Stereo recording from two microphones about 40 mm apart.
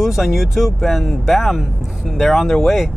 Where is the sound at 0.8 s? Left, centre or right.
Centre.